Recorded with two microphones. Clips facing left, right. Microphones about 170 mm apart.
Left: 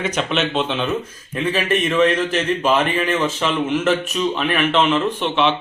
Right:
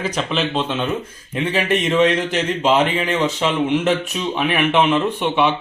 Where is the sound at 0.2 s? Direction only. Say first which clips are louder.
Even; centre (ahead or behind).